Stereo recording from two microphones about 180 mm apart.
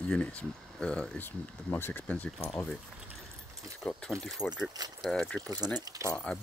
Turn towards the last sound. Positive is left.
turn(degrees=5)  # may be behind; listen again after turning